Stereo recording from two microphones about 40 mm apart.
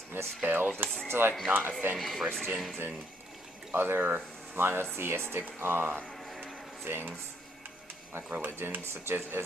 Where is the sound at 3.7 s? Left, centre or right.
Right.